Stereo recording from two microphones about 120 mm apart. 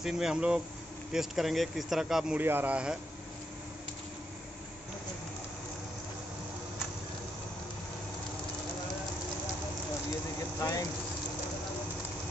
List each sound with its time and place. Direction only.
0.0 s speech: 5° right (ahead or behind)
2.3 s speech: 15° right (ahead or behind)
10.6 s speech: 30° left (ahead or behind)